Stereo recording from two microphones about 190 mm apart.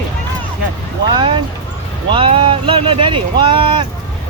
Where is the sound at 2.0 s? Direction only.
25° right (ahead or behind).